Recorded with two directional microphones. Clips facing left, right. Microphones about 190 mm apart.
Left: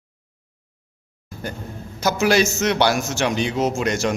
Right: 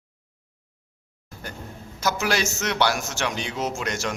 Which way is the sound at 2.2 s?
20° left (ahead or behind).